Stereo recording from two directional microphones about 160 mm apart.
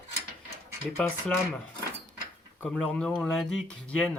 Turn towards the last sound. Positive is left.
turn(degrees=5)  # may be behind; listen again after turning